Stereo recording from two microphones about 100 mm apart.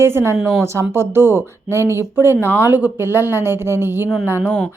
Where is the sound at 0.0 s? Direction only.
25° right (ahead or behind).